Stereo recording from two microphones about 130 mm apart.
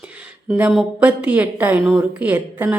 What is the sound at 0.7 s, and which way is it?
Speech, centre (ahead or behind).